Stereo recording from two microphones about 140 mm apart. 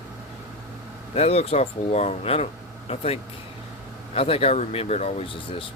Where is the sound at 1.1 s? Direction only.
45° left (ahead or behind).